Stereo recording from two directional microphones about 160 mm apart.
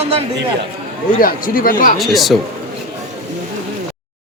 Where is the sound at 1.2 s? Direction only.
60° left (ahead or behind).